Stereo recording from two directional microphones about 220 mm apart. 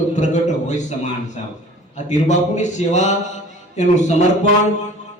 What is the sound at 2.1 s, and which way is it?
A man's voice, 35° left (ahead or behind).